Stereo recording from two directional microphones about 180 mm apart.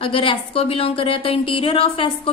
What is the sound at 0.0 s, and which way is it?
Speech, 30° left (ahead or behind).